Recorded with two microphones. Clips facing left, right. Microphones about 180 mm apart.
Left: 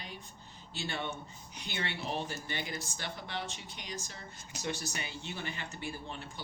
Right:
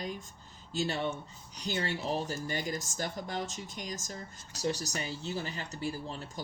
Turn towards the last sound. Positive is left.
turn(degrees=-40)  # may be behind; listen again after turning